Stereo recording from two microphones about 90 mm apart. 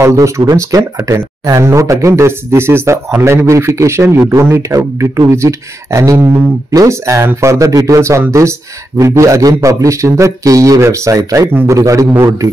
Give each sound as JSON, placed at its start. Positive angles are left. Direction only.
{"t": 0.0, "sound": "speech", "side_deg": -35}